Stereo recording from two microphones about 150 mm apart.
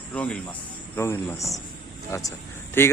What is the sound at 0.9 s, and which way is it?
Speech, 15° left (ahead or behind).